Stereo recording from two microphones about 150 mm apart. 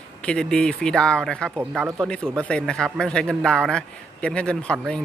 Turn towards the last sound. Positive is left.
turn(degrees=5)  # may be behind; listen again after turning